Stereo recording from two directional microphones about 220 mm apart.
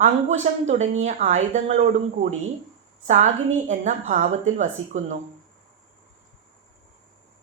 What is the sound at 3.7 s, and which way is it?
Speech, 30° right (ahead or behind).